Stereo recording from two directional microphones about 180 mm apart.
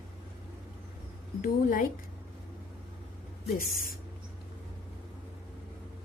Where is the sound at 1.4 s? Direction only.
50° left (ahead or behind).